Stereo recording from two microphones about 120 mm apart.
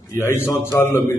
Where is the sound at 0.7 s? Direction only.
20° left (ahead or behind).